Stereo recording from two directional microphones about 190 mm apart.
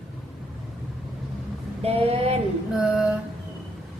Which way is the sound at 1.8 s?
30° right (ahead or behind).